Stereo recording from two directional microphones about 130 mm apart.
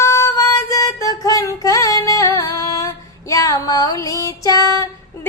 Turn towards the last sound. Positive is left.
turn(degrees=25)  # may be behind; listen again after turning